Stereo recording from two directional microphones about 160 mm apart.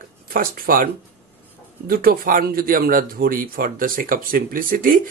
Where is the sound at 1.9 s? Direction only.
65° right (ahead or behind).